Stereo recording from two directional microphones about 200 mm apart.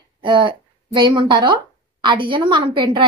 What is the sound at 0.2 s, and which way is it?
A woman's voice, 25° right (ahead or behind).